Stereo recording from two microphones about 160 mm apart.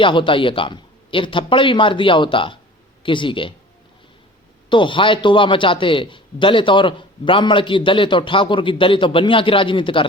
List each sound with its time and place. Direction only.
0.0 s a man's voice: 30° left (ahead or behind)
4.7 s a man's voice: 30° left (ahead or behind)